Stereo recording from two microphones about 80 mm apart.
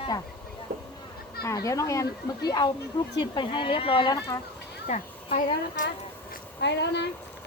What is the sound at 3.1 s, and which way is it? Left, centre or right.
Speech, left.